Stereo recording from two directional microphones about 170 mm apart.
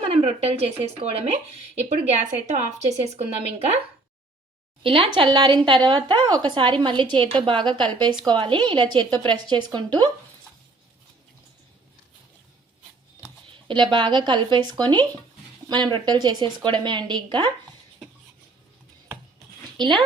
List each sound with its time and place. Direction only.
0.0 s speech: 35° right (ahead or behind)
4.8 s a woman's voice: 30° right (ahead or behind)
13.7 s a woman's voice: 30° right (ahead or behind)
19.7 s speech: centre (ahead or behind)